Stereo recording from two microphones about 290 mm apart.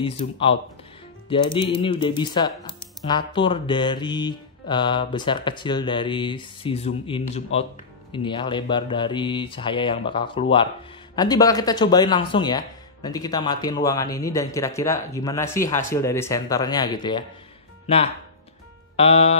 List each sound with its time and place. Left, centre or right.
0.0 s speech: centre